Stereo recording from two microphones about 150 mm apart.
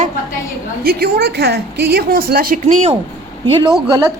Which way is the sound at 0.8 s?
90° right.